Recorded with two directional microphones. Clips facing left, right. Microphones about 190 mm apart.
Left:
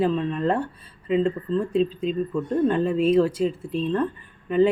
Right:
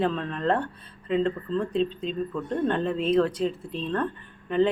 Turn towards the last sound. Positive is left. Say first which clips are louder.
# left 3 dB
turn(degrees=5)  # may be behind; listen again after turning